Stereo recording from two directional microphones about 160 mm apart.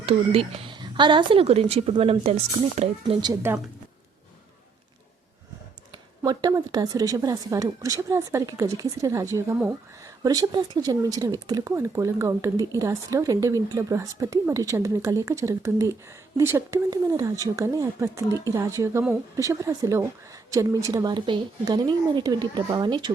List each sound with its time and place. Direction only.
0.0 s a woman's voice: 40° right (ahead or behind)
5.9 s speech: 25° right (ahead or behind)